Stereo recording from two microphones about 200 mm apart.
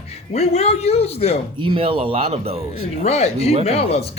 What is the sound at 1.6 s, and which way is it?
Speech, 25° right (ahead or behind).